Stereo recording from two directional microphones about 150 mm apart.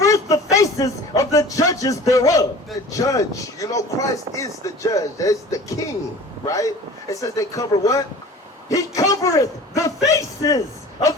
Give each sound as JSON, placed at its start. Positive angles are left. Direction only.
{"t": 0.0, "sound": "a sound", "side_deg": 20}
{"t": 0.5, "sound": "music", "side_deg": 20}
{"t": 2.9, "sound": "speech", "side_deg": 20}